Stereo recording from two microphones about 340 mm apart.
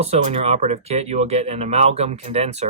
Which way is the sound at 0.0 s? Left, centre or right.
Centre.